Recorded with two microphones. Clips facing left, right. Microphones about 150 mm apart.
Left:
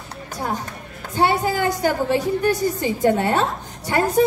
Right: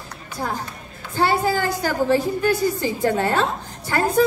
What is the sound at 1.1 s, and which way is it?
A woman's voice, 20° left (ahead or behind).